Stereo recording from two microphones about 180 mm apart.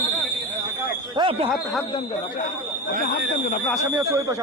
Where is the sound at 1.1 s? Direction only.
30° right (ahead or behind).